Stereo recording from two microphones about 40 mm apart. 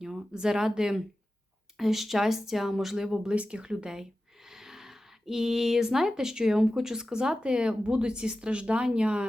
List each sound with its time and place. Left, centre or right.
0.0 s speech: centre
3.3 s speech: right
4.4 s speech: centre; by 9.2 s right